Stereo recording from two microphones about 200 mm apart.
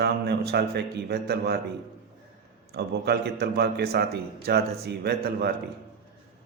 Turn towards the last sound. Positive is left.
turn(degrees=-50)  # may be behind; listen again after turning